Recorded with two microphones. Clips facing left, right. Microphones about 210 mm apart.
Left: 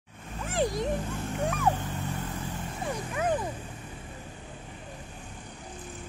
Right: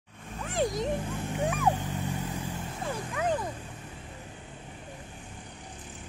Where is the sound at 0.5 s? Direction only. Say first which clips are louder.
Left 1 dB; centre (ahead or behind).